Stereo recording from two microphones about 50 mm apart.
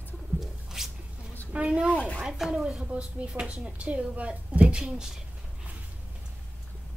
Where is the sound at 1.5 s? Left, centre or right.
Centre.